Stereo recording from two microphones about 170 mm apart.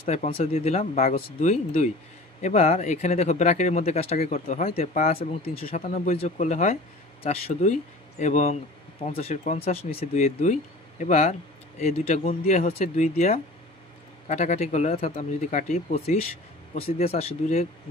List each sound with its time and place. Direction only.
0.1 s speech: 40° left (ahead or behind)
1.0 s speech: 60° left (ahead or behind)
1.5 s speech: 35° left (ahead or behind)
5.7 s speech: 50° left (ahead or behind)